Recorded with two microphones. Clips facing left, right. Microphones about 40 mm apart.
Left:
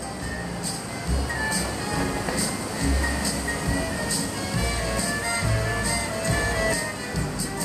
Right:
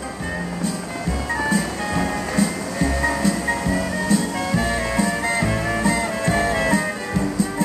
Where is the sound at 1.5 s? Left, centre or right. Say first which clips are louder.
Right 6 dB; right.